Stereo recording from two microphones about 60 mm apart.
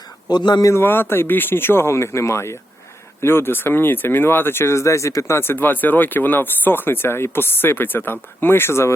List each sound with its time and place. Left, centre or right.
0.8 s speech: left
5.4 s speech: left